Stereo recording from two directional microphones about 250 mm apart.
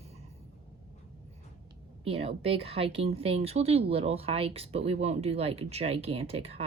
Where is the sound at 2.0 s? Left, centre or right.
Right.